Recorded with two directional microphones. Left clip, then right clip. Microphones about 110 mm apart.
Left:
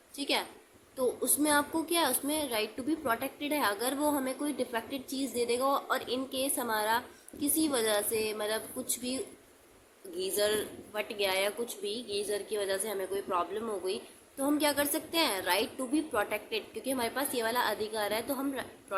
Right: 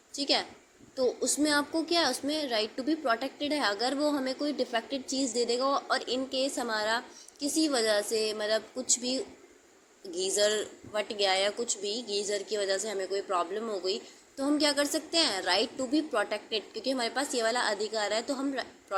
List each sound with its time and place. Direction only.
0.2 s a woman's voice: 15° right (ahead or behind)